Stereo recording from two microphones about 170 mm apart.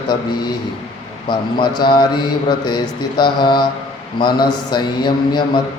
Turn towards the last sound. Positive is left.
turn(degrees=25)  # may be behind; listen again after turning